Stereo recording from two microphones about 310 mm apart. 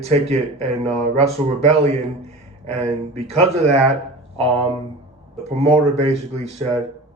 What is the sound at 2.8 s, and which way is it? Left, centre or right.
Speech, centre.